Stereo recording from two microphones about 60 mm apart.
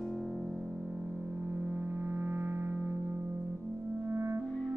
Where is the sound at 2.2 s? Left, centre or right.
Right.